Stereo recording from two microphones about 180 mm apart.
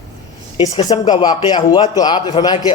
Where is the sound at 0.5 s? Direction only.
20° left (ahead or behind).